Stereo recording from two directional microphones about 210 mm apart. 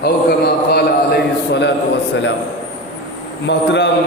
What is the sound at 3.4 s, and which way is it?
Chant, 55° left (ahead or behind).